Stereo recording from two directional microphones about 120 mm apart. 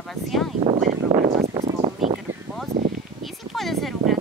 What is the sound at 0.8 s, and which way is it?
Speech, 90° right.